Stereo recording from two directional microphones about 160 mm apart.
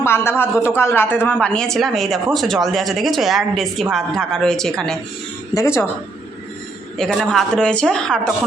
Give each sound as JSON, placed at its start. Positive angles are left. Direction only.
{"t": 0.0, "sound": "a man's voice", "side_deg": 15}
{"t": 5.5, "sound": "a woman's voice", "side_deg": 15}
{"t": 7.0, "sound": "speech", "side_deg": 5}